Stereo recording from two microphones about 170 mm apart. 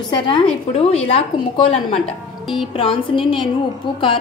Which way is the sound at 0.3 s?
35° left (ahead or behind).